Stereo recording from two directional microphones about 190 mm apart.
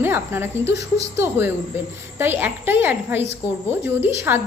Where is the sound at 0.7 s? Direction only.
65° left (ahead or behind).